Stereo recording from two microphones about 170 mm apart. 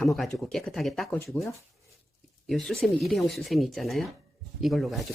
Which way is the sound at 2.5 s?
Centre (ahead or behind).